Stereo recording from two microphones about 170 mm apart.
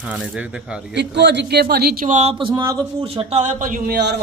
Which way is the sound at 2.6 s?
15° right (ahead or behind).